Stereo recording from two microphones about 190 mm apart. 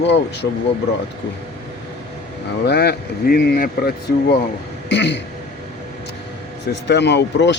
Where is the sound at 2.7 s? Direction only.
60° left (ahead or behind).